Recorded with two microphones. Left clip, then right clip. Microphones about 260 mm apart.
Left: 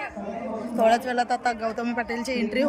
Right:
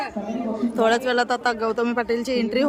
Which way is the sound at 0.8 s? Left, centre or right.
Centre.